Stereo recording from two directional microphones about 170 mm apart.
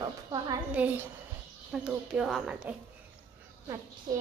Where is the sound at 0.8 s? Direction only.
10° right (ahead or behind).